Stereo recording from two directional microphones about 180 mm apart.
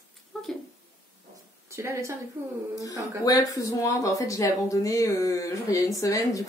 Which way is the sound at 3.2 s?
20° left (ahead or behind).